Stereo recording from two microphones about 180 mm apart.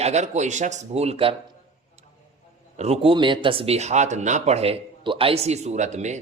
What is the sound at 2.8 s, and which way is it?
Speech, 35° right (ahead or behind).